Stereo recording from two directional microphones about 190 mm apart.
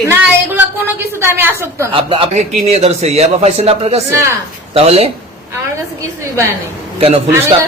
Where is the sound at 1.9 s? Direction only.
25° right (ahead or behind).